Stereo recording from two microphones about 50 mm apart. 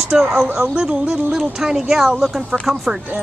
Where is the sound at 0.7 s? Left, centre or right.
Centre.